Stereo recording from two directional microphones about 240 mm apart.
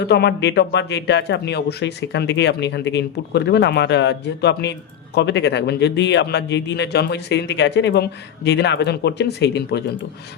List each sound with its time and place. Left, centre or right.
0.0 s speech: left